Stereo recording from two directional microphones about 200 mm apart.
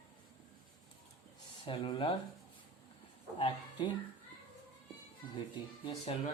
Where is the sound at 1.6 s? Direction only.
25° left (ahead or behind).